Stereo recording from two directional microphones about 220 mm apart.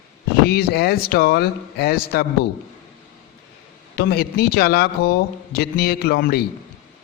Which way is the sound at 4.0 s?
45° left (ahead or behind).